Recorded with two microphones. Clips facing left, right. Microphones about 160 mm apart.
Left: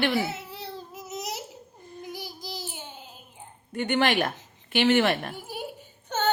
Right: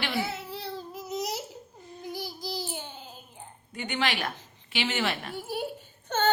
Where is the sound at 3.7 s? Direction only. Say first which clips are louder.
Left 6 dB; 55° left (ahead or behind).